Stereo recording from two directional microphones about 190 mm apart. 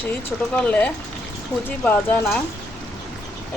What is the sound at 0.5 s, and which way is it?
Speech, 5° left (ahead or behind).